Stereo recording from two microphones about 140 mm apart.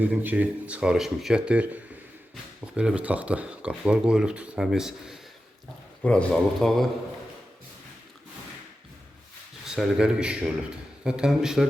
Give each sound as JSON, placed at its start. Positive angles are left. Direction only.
{"t": 0.0, "sound": "speech", "side_deg": -10}
{"t": 6.0, "sound": "speech", "side_deg": 10}
{"t": 9.6, "sound": "a man's voice", "side_deg": -5}